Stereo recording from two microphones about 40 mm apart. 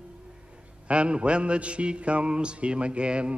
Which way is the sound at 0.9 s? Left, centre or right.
Right.